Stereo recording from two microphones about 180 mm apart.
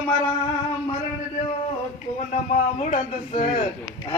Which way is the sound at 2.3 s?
40° left (ahead or behind).